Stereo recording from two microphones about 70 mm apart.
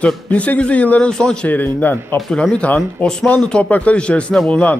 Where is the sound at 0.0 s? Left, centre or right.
Centre.